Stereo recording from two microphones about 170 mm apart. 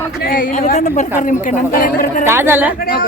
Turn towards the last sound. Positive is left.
turn(degrees=60)  # may be behind; listen again after turning